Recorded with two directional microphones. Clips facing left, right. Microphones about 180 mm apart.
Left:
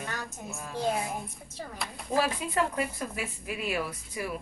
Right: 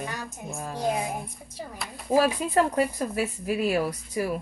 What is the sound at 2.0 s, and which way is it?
Speech, 40° right (ahead or behind).